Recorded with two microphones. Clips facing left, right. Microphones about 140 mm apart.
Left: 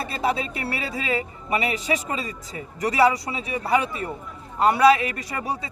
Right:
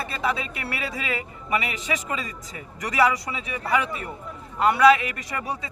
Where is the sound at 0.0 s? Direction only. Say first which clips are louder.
Left 2 dB; 35° left (ahead or behind).